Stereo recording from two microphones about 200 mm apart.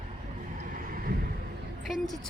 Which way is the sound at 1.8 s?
Centre (ahead or behind).